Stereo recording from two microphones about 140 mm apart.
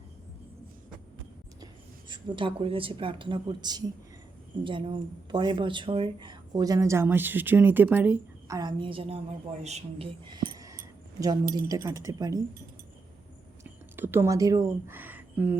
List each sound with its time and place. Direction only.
1.6 s speech: 35° right (ahead or behind); by 8.5 s 15° right (ahead or behind)
8.5 s a woman's voice: 30° right (ahead or behind); by 10.1 s 50° right (ahead or behind)
11.5 s speech: 25° right (ahead or behind)
13.9 s speech: 15° right (ahead or behind)